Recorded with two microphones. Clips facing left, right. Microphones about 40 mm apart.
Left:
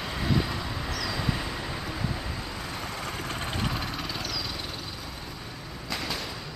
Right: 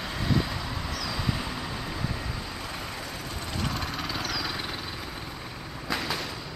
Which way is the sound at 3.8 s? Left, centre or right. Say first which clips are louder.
Right 1 dB; centre.